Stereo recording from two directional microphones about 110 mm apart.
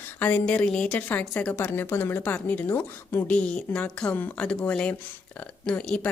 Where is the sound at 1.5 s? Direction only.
20° left (ahead or behind).